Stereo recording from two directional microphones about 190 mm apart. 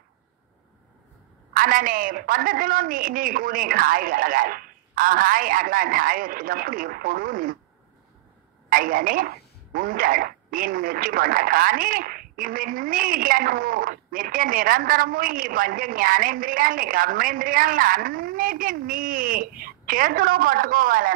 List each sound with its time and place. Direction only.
1.5 s speech: 50° right (ahead or behind)
8.6 s speech: 50° right (ahead or behind)